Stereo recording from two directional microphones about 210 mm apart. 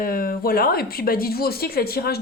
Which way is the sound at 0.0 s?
45° left (ahead or behind).